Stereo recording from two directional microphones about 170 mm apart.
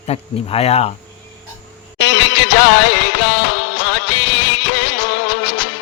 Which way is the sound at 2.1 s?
90° left.